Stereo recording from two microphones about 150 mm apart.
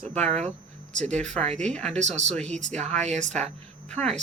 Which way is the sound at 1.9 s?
50° right (ahead or behind).